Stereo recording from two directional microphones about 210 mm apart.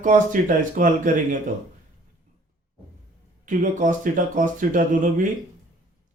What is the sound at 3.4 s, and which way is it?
Speech, 35° right (ahead or behind).